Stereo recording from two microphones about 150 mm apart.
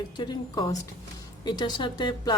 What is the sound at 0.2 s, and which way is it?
A woman's voice, 30° left (ahead or behind).